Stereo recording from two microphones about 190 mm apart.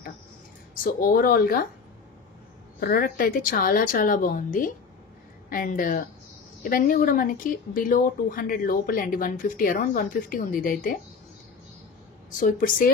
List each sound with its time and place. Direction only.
1.0 s speech: 50° left (ahead or behind)
2.8 s speech: 50° left (ahead or behind)
12.4 s speech: 45° left (ahead or behind)